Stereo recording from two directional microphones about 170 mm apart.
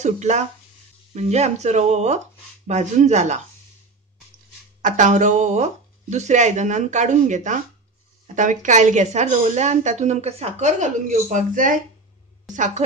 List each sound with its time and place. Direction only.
0.0 s a woman's voice: 45° right (ahead or behind)
4.8 s a woman's voice: 45° right (ahead or behind)